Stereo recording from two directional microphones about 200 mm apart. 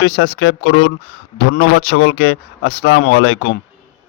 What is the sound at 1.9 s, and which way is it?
Speech, 85° left.